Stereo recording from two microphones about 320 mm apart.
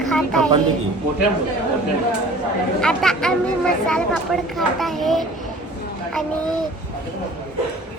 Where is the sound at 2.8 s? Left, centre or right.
Centre.